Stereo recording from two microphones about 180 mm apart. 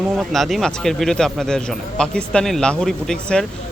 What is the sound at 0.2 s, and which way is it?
Speech, centre (ahead or behind).